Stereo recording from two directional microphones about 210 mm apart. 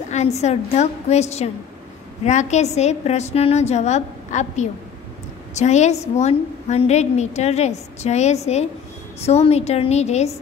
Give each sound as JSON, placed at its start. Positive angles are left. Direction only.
{"t": 0.1, "sound": "a woman's voice", "side_deg": 30}